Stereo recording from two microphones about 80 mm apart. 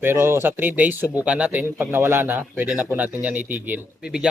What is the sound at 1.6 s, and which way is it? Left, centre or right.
Speech, right.